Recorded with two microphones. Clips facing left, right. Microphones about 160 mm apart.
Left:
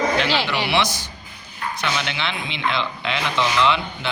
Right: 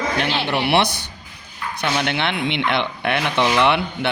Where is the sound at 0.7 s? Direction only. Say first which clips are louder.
Right 3 dB; 60° right (ahead or behind).